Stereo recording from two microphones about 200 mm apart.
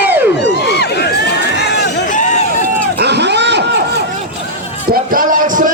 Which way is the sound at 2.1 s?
40° left (ahead or behind).